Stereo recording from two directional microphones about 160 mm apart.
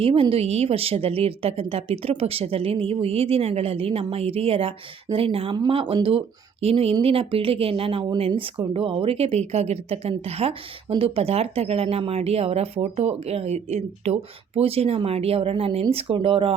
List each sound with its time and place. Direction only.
0.0 s speech: 35° right (ahead or behind)